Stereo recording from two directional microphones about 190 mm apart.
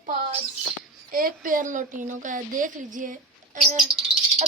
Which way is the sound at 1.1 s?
50° right (ahead or behind).